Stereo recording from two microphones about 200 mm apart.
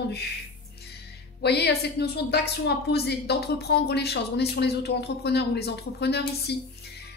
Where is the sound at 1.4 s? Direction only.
55° left (ahead or behind).